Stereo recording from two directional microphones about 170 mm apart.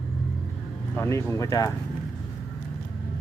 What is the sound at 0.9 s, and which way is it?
Speech, 15° left (ahead or behind).